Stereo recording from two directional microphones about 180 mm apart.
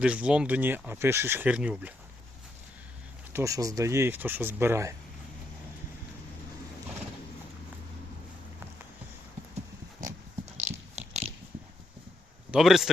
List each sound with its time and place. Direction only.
0.0 s speech: 5° right (ahead or behind)
3.3 s speech: 20° right (ahead or behind)
10.6 s biting: 40° right (ahead or behind)
12.5 s a man's voice: centre (ahead or behind)